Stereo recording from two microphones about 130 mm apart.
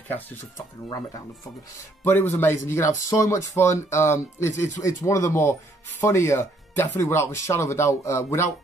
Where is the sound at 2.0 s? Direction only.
15° left (ahead or behind).